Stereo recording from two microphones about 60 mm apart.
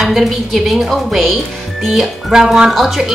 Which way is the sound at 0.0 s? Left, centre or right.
Centre.